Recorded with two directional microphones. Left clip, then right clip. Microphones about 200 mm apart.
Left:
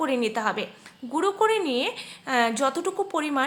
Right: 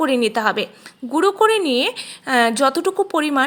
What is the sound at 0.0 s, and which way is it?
A woman's voice, 35° right (ahead or behind).